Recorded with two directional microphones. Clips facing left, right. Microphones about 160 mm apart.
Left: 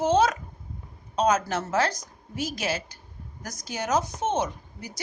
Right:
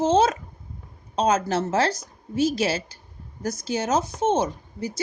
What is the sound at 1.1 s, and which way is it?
A woman's voice, 30° right (ahead or behind).